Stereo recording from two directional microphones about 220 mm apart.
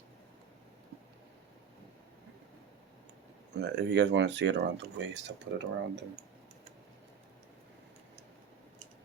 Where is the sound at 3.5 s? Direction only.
50° right (ahead or behind).